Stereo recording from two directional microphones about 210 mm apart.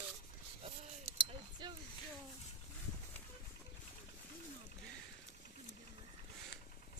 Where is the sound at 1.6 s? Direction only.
20° right (ahead or behind).